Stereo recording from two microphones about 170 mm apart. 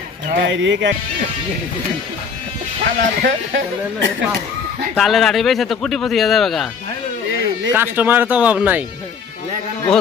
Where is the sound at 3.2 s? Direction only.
90° right.